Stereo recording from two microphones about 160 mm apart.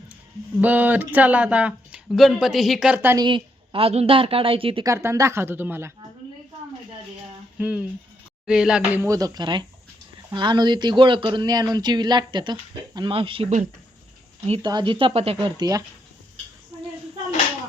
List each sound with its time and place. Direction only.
0.6 s speech: 10° right (ahead or behind)
3.2 s a woman's voice: 30° right (ahead or behind)
4.9 s speech: 20° right (ahead or behind)
7.6 s speech: 5° right (ahead or behind)
9.0 s a woman's voice: 20° right (ahead or behind)